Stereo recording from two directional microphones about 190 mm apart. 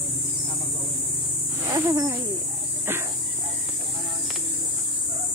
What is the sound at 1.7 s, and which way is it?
Speech, 15° right (ahead or behind).